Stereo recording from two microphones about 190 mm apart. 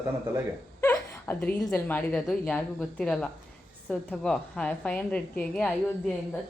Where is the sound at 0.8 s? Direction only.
15° left (ahead or behind).